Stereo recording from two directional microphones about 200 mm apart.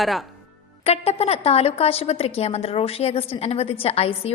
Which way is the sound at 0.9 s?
30° left (ahead or behind).